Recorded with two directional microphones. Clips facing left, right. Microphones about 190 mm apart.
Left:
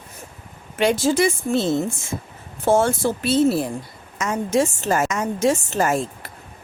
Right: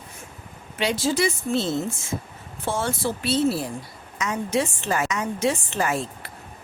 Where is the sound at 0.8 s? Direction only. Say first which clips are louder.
Left 5 dB; 50° left (ahead or behind).